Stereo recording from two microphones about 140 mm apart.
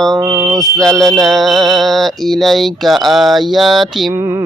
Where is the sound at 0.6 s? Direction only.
Centre (ahead or behind).